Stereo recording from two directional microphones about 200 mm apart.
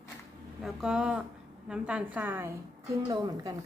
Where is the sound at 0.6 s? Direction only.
5° right (ahead or behind); by 3.5 s 20° right (ahead or behind).